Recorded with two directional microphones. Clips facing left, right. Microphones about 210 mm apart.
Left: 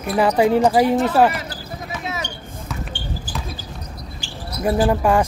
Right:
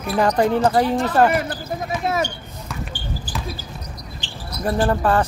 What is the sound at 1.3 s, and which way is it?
Speech, 50° right (ahead or behind).